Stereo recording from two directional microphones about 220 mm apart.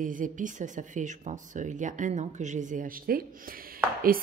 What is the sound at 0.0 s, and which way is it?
A woman's voice, 35° right (ahead or behind).